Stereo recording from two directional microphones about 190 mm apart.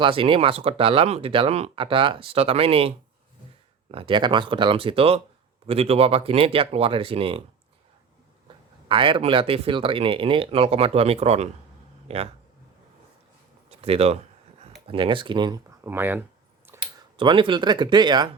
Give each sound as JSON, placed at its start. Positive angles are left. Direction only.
{"t": 0.0, "sound": "speech", "side_deg": -30}
{"t": 3.9, "sound": "speech", "side_deg": -25}
{"t": 8.4, "sound": "speech", "side_deg": -25}
{"t": 13.7, "sound": "a sound", "side_deg": -30}
{"t": 14.8, "sound": "speech", "side_deg": -25}
{"t": 16.8, "sound": "speech", "side_deg": -25}